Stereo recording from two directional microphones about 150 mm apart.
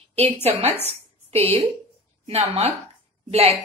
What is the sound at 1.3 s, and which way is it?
Speech, 45° right (ahead or behind).